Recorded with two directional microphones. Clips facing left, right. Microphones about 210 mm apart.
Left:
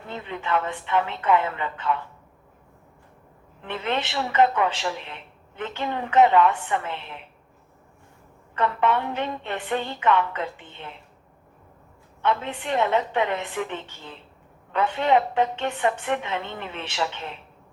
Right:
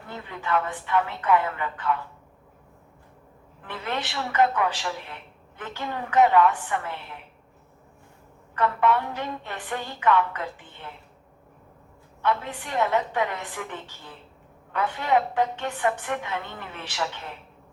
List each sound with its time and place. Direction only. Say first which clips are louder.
0.1 s a woman's voice: left 1 dB; 20° left (ahead or behind)
3.6 s a woman's voice: left 4 dB; 25° left (ahead or behind)
8.5 s a woman's voice: even; 25° left (ahead or behind)
12.2 s a woman's voice: left 2 dB; 20° left (ahead or behind)